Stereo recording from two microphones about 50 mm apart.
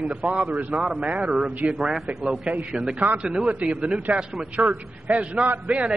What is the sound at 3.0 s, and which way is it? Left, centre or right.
Speech, right.